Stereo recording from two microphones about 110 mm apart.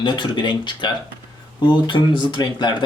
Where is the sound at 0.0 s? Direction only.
45° left (ahead or behind).